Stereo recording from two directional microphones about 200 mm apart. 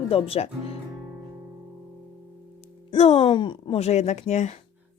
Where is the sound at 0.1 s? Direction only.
30° left (ahead or behind).